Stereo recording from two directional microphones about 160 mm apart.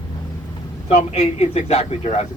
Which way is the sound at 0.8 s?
45° left (ahead or behind).